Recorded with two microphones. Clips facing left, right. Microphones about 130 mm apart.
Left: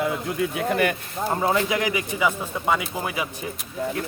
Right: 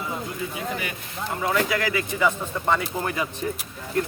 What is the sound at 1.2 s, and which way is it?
Speech, 35° left (ahead or behind).